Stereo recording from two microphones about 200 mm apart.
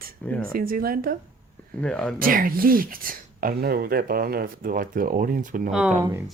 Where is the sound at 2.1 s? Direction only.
45° right (ahead or behind).